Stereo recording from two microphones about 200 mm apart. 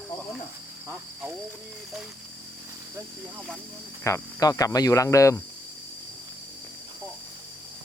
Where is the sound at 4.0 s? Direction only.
15° left (ahead or behind).